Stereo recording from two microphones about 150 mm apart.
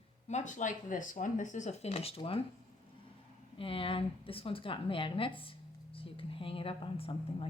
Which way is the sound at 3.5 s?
35° left (ahead or behind).